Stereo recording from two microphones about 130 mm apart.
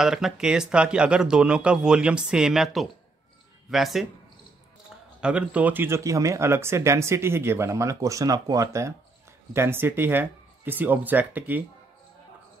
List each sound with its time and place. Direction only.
0.0 s speech: 5° right (ahead or behind)
5.2 s speech: 10° right (ahead or behind)